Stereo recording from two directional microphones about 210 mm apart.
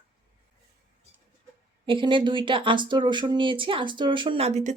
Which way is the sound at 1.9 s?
25° right (ahead or behind).